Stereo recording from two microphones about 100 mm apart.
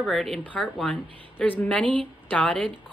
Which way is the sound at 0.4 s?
15° left (ahead or behind).